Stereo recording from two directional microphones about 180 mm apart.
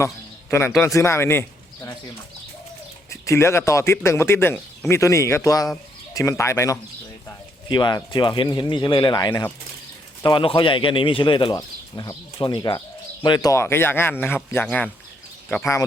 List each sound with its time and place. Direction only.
0.8 s speech: 15° left (ahead or behind)
3.1 s a man's voice: 15° left (ahead or behind)